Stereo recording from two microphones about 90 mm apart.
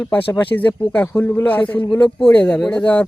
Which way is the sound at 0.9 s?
20° left (ahead or behind).